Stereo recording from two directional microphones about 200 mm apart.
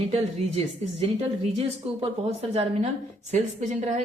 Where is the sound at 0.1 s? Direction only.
30° right (ahead or behind).